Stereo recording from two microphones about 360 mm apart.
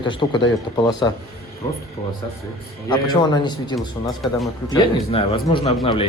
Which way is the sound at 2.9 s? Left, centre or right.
Centre.